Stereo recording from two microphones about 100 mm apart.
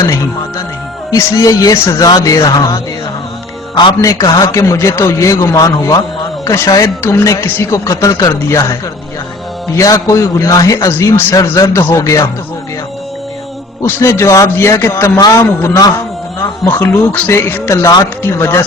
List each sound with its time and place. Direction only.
1.1 s a man's voice: 35° left (ahead or behind)
4.0 s a man's voice: 35° left (ahead or behind)
10.9 s speech: 25° left (ahead or behind)
13.8 s speech: 30° left (ahead or behind)